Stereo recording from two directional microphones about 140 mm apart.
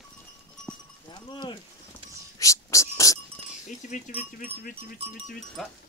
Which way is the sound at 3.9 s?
75° left (ahead or behind).